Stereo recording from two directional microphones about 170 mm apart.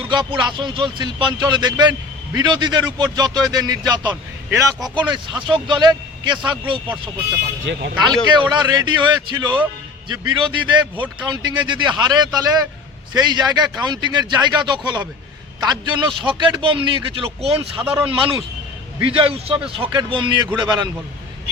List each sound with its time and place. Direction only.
0.1 s speech: 25° right (ahead or behind)
4.1 s speech: 10° right (ahead or behind)
4.8 s speech: 25° right (ahead or behind)
7.6 s speech: 90° right
8.0 s a man's voice: 25° right (ahead or behind)